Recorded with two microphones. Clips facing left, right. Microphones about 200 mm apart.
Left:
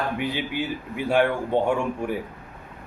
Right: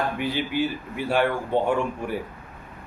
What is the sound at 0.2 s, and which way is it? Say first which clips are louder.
A man's voice: right 2 dB; 15° left (ahead or behind).